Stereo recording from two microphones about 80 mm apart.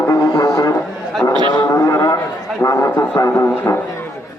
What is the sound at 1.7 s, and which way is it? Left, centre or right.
Cattle, left.